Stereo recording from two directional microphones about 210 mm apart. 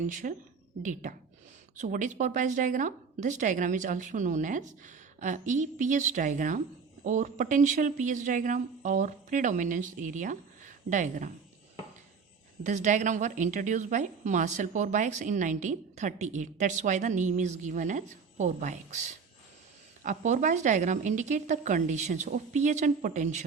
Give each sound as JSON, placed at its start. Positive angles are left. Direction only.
{"t": 0.1, "sound": "a woman's voice", "side_deg": -40}
{"t": 12.6, "sound": "a woman's voice", "side_deg": -35}